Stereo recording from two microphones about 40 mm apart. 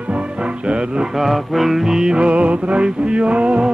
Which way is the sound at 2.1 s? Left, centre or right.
Right.